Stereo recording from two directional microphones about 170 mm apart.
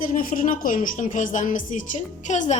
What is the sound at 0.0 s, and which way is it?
A woman's voice, 50° left (ahead or behind).